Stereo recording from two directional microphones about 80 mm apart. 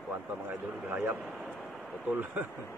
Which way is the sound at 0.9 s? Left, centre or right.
Right.